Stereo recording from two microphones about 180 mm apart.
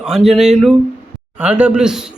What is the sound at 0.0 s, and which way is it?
A man's voice, centre (ahead or behind).